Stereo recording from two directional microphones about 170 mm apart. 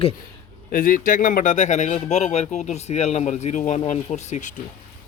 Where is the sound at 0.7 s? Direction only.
55° left (ahead or behind).